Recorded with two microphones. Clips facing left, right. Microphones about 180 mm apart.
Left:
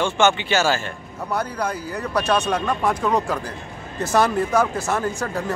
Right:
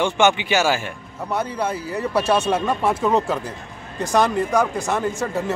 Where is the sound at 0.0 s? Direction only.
15° right (ahead or behind).